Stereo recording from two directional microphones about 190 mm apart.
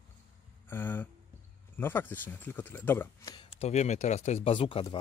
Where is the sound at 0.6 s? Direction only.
10° left (ahead or behind).